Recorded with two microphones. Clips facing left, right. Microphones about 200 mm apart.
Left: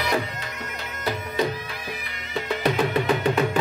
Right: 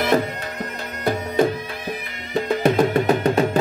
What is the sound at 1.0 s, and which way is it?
Bagpipes, 50° right (ahead or behind).